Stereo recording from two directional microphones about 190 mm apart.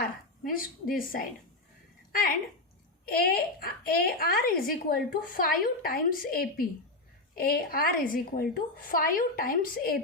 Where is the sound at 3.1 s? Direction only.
50° left (ahead or behind).